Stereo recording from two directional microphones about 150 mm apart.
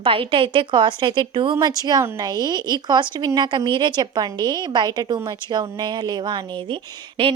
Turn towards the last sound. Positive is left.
turn(degrees=-35)  # may be behind; listen again after turning